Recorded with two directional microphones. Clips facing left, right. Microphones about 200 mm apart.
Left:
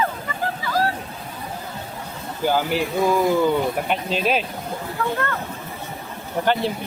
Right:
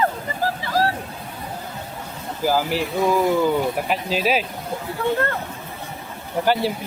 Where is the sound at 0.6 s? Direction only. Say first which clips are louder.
Even; 30° right (ahead or behind).